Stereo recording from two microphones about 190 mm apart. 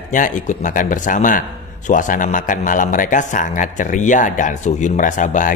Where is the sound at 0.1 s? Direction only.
40° left (ahead or behind).